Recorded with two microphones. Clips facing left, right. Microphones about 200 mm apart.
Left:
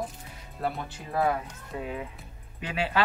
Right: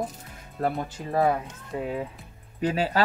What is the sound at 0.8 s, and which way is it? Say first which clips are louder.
Speech: right 3 dB; 35° right (ahead or behind).